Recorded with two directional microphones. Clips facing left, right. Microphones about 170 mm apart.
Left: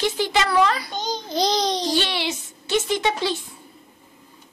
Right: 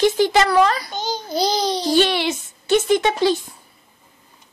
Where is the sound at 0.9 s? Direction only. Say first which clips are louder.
Right 2 dB; 5° right (ahead or behind).